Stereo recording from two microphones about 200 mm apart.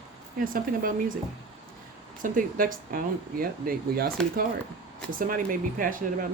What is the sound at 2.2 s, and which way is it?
Speech, 45° right (ahead or behind).